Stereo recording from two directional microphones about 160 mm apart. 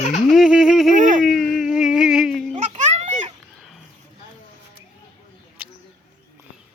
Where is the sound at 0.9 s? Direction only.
50° right (ahead or behind).